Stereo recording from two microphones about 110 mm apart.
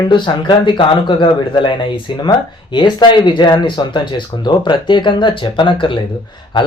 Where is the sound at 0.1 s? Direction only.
45° left (ahead or behind).